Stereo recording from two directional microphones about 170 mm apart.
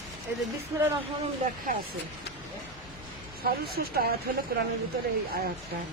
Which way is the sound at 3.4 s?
65° right (ahead or behind).